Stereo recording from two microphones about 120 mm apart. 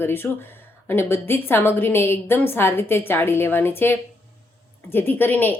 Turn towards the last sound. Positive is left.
turn(degrees=15)  # may be behind; listen again after turning